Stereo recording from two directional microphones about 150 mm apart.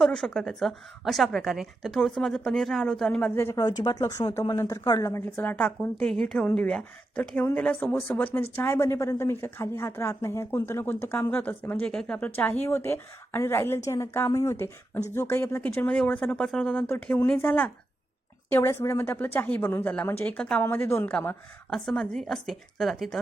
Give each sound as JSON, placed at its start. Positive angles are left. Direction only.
{"t": 0.0, "sound": "a woman's voice", "side_deg": 5}
{"t": 16.9, "sound": "a woman's voice", "side_deg": 15}